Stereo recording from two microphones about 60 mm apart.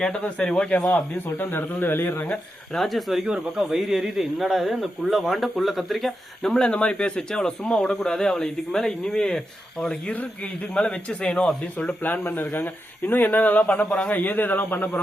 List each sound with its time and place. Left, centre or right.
0.0 s a man's voice: centre
0.9 s speech: left
2.7 s speech: centre
3.2 s speech: centre
10.1 s a man's voice: left
11.9 s speech: left